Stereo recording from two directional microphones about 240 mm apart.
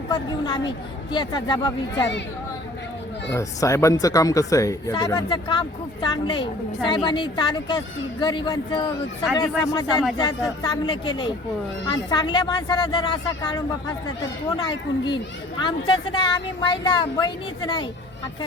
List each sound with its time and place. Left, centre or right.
0.1 s speech: centre
2.0 s speech: left
3.3 s speech: centre